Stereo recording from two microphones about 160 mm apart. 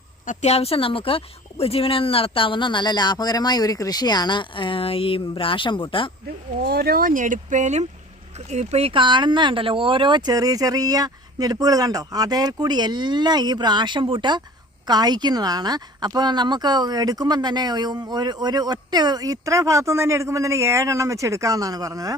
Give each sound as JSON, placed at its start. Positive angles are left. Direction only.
{"t": 0.3, "sound": "speech", "side_deg": 40}
{"t": 6.7, "sound": "speech", "side_deg": -70}